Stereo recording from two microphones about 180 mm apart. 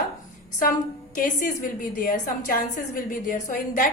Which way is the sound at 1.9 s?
45° left (ahead or behind).